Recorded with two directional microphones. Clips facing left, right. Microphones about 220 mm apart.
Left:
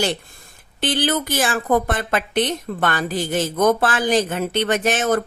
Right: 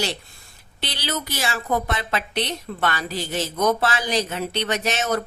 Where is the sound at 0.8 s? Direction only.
50° left (ahead or behind).